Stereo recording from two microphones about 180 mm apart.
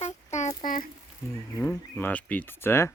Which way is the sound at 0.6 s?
50° left (ahead or behind).